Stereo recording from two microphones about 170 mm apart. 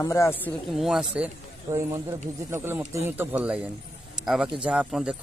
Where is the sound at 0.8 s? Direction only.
Centre (ahead or behind).